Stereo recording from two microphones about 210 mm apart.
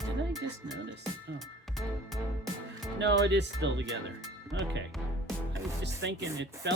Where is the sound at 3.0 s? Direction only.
55° right (ahead or behind).